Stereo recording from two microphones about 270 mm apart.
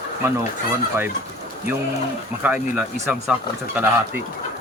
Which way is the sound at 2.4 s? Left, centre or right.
Centre.